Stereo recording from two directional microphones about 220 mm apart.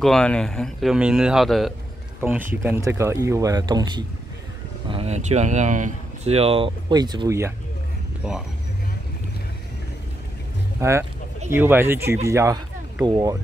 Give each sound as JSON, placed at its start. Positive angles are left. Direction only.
{"t": 0.0, "sound": "speech", "side_deg": 5}
{"t": 8.2, "sound": "speech", "side_deg": 0}
{"t": 10.8, "sound": "speech", "side_deg": -10}